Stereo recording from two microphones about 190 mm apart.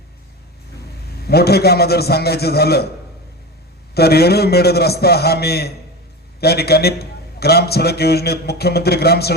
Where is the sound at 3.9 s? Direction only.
55° left (ahead or behind).